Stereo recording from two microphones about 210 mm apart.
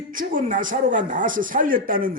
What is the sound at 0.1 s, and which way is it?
Speech, 40° right (ahead or behind).